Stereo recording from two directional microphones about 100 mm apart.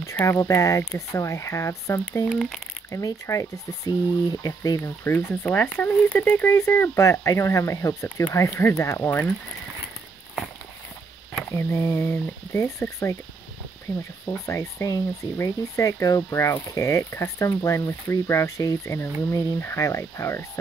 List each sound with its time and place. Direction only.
0.0 s speech: 25° left (ahead or behind)
2.2 s speech: 5° left (ahead or behind)
2.9 s speech: 35° left (ahead or behind)
11.4 s speech: 25° left (ahead or behind)
14.2 s speech: 30° left (ahead or behind)